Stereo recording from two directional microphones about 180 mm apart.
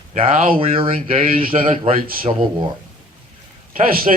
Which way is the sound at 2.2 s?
30° right (ahead or behind).